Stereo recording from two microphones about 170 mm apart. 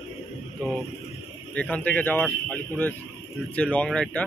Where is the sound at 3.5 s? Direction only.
5° left (ahead or behind).